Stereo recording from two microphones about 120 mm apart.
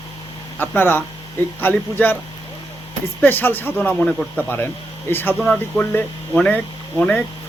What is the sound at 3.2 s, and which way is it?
Speech, 15° left (ahead or behind).